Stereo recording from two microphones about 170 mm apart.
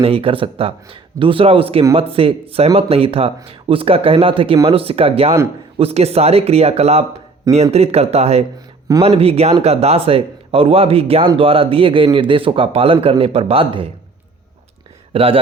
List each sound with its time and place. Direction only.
0.0 s a man's voice: 35° right (ahead or behind)
15.1 s speech: 35° right (ahead or behind)